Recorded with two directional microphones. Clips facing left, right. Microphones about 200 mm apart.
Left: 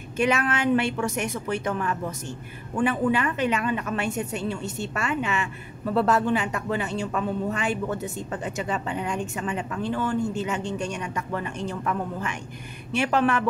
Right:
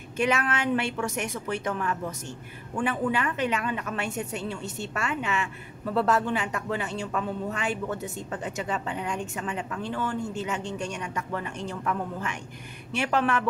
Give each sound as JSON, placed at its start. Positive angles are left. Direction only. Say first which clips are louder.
{"t": 0.2, "sound": "a woman's voice", "louder": "left 3 dB", "side_deg": 15}